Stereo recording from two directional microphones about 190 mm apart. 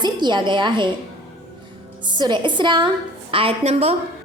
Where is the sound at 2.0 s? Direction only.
25° right (ahead or behind).